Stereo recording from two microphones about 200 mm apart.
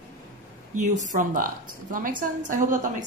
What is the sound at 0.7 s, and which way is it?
A woman's voice, 40° right (ahead or behind).